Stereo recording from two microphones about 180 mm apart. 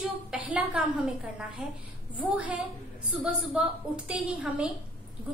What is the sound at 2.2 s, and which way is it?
A woman's voice, 5° right (ahead or behind).